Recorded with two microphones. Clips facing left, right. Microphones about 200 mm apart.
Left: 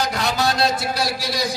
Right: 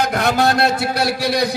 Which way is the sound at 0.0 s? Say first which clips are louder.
Right 5 dB; 55° right (ahead or behind).